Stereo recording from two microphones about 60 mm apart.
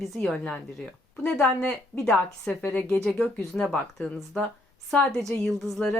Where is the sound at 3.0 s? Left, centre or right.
Centre.